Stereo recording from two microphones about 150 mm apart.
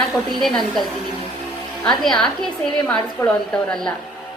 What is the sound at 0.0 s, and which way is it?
A woman's voice, centre (ahead or behind).